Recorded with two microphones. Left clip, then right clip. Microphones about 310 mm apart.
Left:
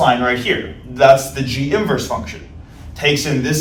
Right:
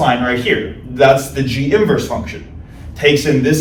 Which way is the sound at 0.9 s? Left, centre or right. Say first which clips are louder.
Even; centre.